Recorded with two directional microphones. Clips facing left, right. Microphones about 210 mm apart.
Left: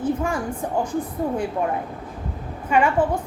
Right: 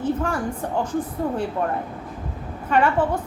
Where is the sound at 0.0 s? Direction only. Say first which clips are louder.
Even; 10° left (ahead or behind).